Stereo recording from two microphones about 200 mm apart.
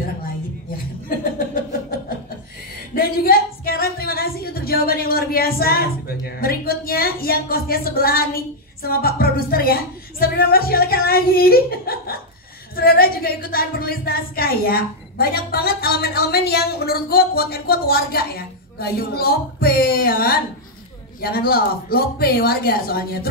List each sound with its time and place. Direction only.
1.0 s chuckle: 45° left (ahead or behind)
2.9 s a sound: 45° left (ahead or behind)
12.7 s a woman's voice: 50° left (ahead or behind)